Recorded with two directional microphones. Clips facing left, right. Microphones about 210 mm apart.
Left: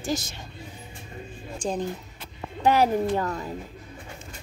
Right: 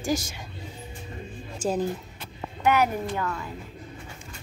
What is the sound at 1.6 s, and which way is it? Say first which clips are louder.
Speech: right 2 dB; 5° right (ahead or behind).